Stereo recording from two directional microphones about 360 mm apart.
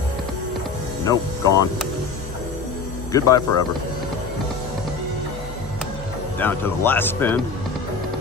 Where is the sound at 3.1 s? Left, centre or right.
Centre.